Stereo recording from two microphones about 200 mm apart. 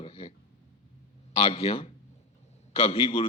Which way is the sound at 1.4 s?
30° left (ahead or behind).